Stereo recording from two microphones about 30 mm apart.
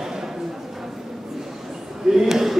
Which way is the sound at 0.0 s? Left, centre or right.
Centre.